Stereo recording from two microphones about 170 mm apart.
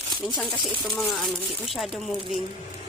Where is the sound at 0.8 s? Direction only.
Centre (ahead or behind).